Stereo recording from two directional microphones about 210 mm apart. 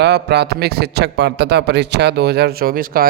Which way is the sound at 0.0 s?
50° right (ahead or behind).